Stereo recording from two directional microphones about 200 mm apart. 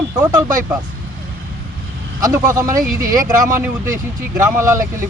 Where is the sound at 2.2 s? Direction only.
15° right (ahead or behind).